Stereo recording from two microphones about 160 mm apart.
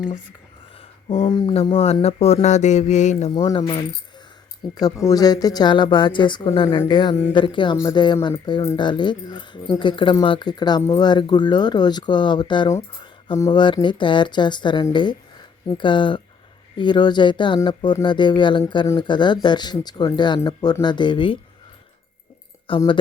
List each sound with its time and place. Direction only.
0.8 s speech: 35° left (ahead or behind)
3.3 s speech: 25° left (ahead or behind)
4.7 s speech: 25° left (ahead or behind)
22.7 s speech: 30° left (ahead or behind)